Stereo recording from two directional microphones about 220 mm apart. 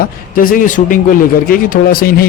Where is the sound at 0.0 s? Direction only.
40° left (ahead or behind).